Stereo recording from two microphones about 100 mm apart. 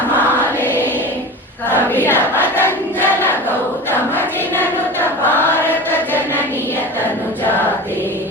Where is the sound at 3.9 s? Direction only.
20° left (ahead or behind).